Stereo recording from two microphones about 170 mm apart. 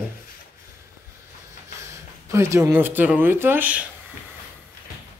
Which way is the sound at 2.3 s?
15° right (ahead or behind).